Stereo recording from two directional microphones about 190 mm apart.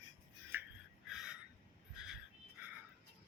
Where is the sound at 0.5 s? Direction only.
10° right (ahead or behind).